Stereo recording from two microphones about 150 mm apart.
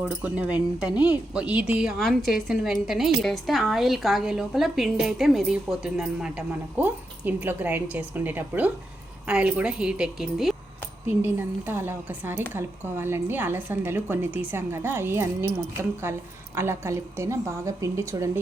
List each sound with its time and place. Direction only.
0.0 s a woman's voice: 10° right (ahead or behind)
11.2 s a woman's voice: 15° right (ahead or behind)
16.6 s a woman's voice: 15° right (ahead or behind)